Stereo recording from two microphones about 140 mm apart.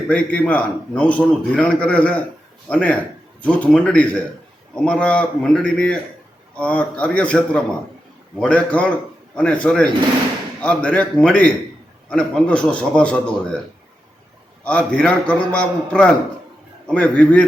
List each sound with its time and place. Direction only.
0.1 s a man's voice: 10° left (ahead or behind)
14.6 s a man's voice: 10° left (ahead or behind)